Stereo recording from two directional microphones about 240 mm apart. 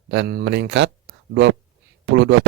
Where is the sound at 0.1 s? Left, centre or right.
Right.